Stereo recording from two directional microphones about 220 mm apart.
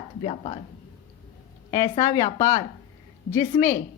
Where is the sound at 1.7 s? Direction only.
15° left (ahead or behind).